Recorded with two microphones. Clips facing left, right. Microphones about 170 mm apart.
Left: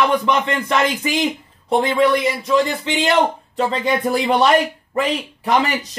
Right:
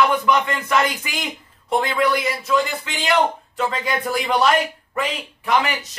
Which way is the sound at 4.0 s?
25° left (ahead or behind).